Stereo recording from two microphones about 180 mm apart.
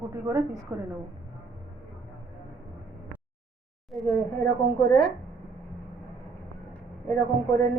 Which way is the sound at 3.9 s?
Centre (ahead or behind).